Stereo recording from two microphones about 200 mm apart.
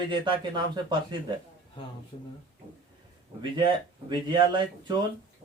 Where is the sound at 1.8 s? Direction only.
25° left (ahead or behind).